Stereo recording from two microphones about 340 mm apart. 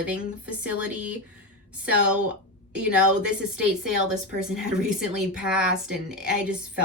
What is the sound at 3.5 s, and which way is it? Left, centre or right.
Speech, right.